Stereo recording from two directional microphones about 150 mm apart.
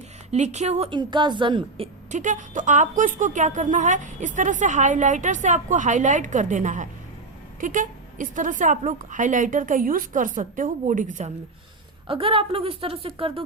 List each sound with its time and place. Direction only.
0.3 s speech: 50° right (ahead or behind)
0.9 s speech: 30° right (ahead or behind)
2.1 s speech: 55° right (ahead or behind)
12.0 s speech: 35° right (ahead or behind)